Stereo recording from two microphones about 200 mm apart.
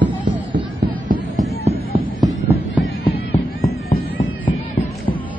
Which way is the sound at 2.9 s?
55° left (ahead or behind).